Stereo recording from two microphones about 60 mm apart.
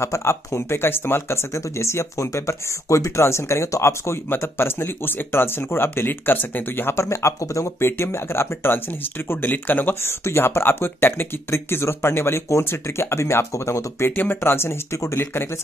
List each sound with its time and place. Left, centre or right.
0.0 s speech: left
1.5 s speech: left
7.0 s speech: left
9.5 s speech: left
10.2 s speech: left
14.1 s speech: left
14.4 s speech: left